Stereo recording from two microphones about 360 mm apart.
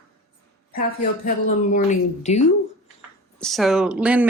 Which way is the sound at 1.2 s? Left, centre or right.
Left.